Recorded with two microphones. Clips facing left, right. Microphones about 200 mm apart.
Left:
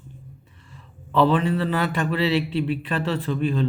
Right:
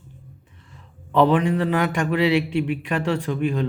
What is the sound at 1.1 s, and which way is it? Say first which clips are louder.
A man's voice: right 2 dB; 15° right (ahead or behind).